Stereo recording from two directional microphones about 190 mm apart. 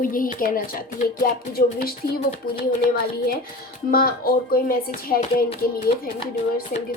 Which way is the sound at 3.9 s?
50° left (ahead or behind).